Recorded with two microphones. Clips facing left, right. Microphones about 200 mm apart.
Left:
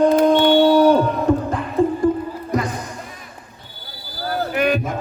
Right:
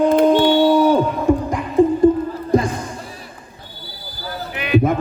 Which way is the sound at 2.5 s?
30° right (ahead or behind).